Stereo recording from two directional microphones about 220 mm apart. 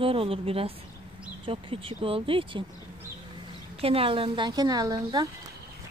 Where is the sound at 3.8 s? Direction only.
25° right (ahead or behind).